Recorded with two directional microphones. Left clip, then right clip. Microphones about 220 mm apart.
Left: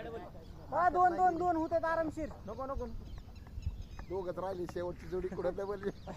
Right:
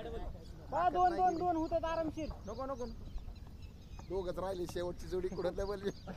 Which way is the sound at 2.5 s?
55° right (ahead or behind).